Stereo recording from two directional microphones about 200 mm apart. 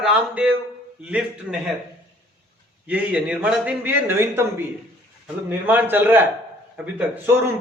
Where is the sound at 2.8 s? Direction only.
5° right (ahead or behind).